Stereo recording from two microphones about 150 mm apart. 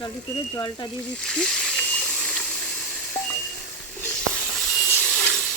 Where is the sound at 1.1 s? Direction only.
5° left (ahead or behind).